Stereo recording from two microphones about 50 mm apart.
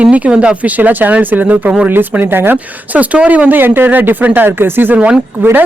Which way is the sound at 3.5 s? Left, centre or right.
Right.